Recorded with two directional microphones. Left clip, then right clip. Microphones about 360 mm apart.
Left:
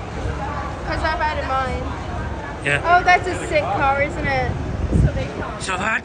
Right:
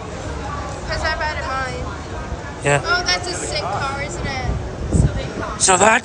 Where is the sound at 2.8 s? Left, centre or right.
Centre.